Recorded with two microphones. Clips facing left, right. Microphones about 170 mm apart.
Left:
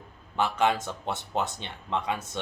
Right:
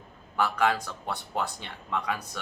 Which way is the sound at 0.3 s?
20° left (ahead or behind).